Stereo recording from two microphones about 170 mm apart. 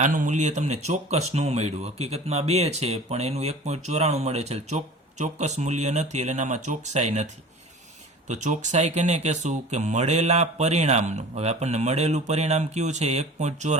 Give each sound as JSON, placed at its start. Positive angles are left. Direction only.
{"t": 0.0, "sound": "speech", "side_deg": -50}
{"t": 8.3, "sound": "speech", "side_deg": -45}